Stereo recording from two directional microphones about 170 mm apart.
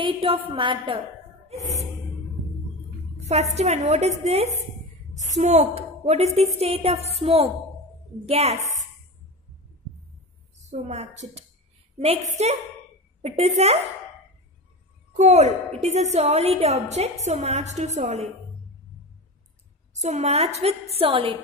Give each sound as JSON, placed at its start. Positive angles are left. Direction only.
{"t": 0.0, "sound": "a woman's voice", "side_deg": -30}
{"t": 3.2, "sound": "a woman's voice", "side_deg": -40}
{"t": 10.7, "sound": "a woman's voice", "side_deg": -40}
{"t": 15.1, "sound": "a woman's voice", "side_deg": -40}
{"t": 19.9, "sound": "a woman's voice", "side_deg": -40}